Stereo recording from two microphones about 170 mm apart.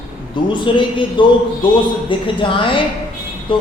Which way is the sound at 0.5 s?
30° left (ahead or behind).